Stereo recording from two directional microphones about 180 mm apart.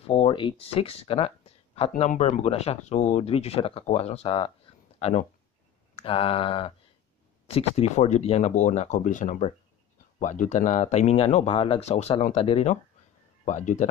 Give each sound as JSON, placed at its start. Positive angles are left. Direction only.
{"t": 0.0, "sound": "speech", "side_deg": 30}
{"t": 4.9, "sound": "a sound", "side_deg": 35}
{"t": 6.0, "sound": "speech", "side_deg": 30}